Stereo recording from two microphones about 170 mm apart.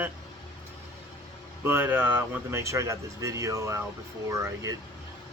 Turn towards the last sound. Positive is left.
turn(degrees=-15)  # may be behind; listen again after turning